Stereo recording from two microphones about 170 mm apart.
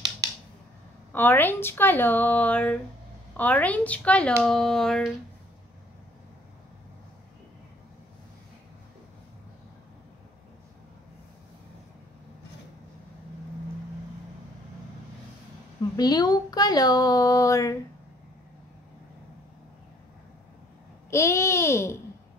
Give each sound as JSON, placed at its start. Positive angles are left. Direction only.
{"t": 1.1, "sound": "speech", "side_deg": 10}
{"t": 16.0, "sound": "speech", "side_deg": 25}
{"t": 21.1, "sound": "speech", "side_deg": 15}